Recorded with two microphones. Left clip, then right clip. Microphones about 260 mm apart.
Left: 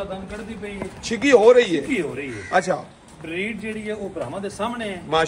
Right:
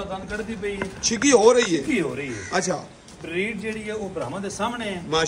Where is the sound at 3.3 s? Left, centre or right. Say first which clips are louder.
Right 1 dB; right.